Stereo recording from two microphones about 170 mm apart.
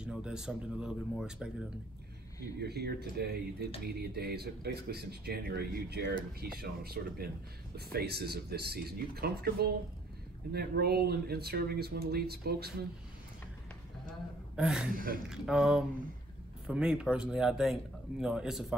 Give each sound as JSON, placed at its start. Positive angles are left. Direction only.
{"t": 0.0, "sound": "speech", "side_deg": -5}
{"t": 2.6, "sound": "speech", "side_deg": -70}
{"t": 14.5, "sound": "speech", "side_deg": -5}